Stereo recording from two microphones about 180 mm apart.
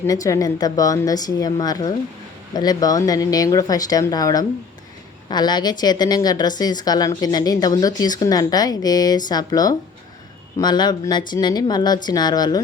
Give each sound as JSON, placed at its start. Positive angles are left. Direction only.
{"t": 0.0, "sound": "speech", "side_deg": 20}